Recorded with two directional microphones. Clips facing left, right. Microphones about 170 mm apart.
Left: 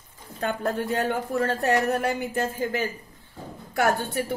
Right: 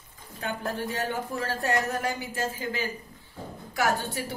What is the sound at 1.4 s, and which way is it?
Speech, 60° left (ahead or behind).